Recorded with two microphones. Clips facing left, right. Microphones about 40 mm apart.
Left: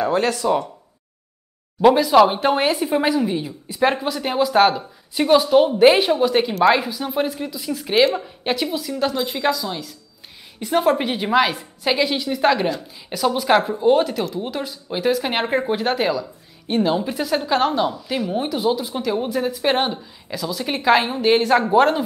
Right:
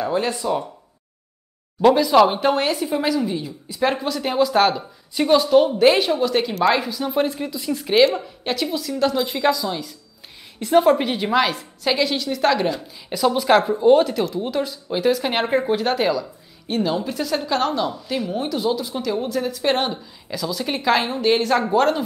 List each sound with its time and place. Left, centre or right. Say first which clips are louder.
0.4 s speech: left 5 dB; left
1.8 s speech: left 1 dB; centre
8.2 s a woman's voice: left 2 dB; centre